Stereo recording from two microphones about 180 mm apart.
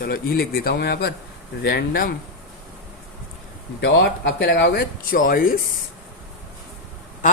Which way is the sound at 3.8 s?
70° left (ahead or behind).